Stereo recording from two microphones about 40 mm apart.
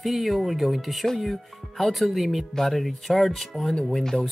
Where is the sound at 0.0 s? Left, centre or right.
Centre.